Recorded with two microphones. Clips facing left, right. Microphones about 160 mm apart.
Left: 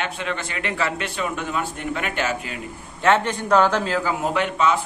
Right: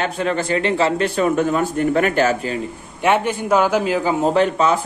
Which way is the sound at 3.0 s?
10° right (ahead or behind).